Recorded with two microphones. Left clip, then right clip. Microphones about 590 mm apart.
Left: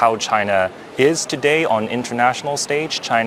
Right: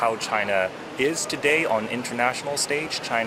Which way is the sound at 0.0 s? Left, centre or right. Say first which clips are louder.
Left 7 dB; left.